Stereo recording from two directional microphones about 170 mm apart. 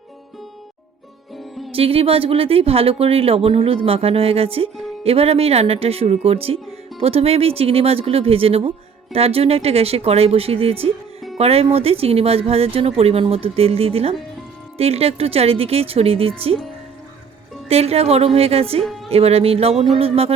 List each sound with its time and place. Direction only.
1.7 s speech: 35° right (ahead or behind)
17.7 s speech: 35° right (ahead or behind)
18.8 s a woman's voice: centre (ahead or behind)
19.1 s speech: 35° right (ahead or behind)